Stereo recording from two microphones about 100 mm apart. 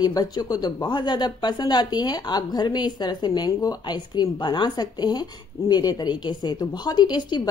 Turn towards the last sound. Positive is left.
turn(degrees=45)  # may be behind; listen again after turning